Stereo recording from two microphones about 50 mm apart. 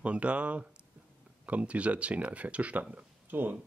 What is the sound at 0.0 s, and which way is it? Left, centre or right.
Speech, right.